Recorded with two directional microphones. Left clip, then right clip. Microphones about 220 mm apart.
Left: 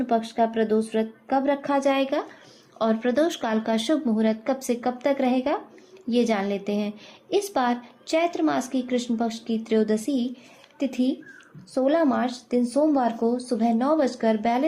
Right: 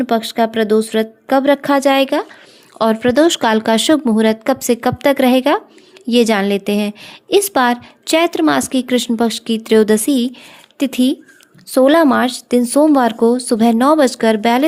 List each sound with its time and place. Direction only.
0.0 s a woman's voice: 45° right (ahead or behind)